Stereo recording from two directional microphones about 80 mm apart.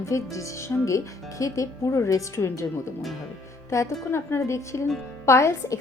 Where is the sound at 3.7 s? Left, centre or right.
Left.